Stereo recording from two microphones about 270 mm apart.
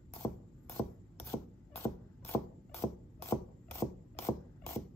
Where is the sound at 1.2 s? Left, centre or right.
Centre.